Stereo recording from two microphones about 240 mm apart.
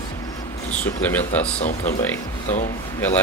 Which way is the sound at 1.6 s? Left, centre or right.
Left.